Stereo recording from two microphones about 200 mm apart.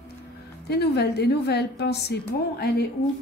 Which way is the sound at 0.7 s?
55° left (ahead or behind).